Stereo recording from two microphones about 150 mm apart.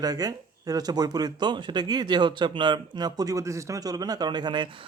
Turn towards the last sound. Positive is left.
turn(degrees=-30)  # may be behind; listen again after turning